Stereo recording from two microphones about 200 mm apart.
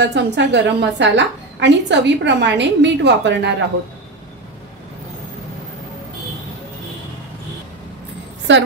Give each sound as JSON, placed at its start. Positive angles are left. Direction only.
{"t": 0.0, "sound": "a woman's voice", "side_deg": -60}
{"t": 8.5, "sound": "a woman's voice", "side_deg": -65}